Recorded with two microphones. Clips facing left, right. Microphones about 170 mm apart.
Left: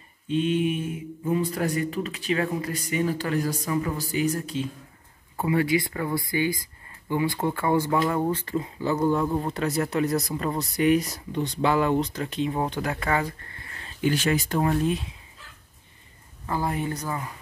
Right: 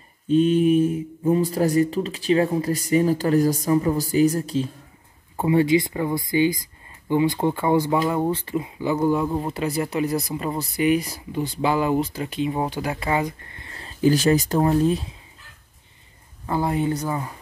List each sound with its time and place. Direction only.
0.3 s speech: 40° right (ahead or behind)
5.3 s speech: 20° right (ahead or behind); by 13.1 s 5° right (ahead or behind)
13.1 s a sound: 20° right (ahead or behind)
13.7 s speech: 35° right (ahead or behind)
16.4 s speech: 25° right (ahead or behind)